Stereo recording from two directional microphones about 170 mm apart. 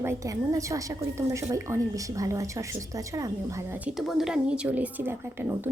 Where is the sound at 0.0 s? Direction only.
15° right (ahead or behind).